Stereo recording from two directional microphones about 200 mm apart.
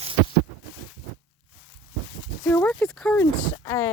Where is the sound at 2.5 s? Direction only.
5° left (ahead or behind).